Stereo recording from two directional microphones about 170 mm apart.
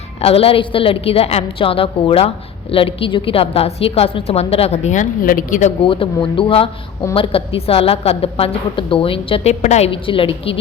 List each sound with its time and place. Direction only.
0.2 s a woman's voice: 35° left (ahead or behind)
5.8 s a woman's voice: 30° left (ahead or behind)